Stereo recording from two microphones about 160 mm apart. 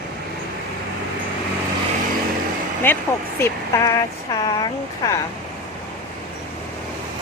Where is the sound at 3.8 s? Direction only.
25° left (ahead or behind).